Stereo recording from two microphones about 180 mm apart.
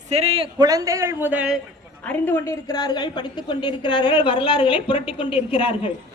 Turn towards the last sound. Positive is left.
turn(degrees=30)  # may be behind; listen again after turning